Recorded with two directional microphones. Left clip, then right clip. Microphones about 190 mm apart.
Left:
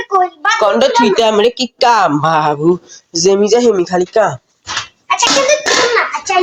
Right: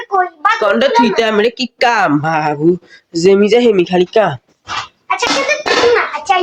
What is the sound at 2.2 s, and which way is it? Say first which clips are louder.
Speech: left 2 dB; 5° right (ahead or behind).